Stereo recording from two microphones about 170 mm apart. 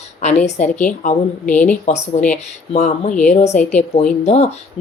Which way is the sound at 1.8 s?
40° left (ahead or behind).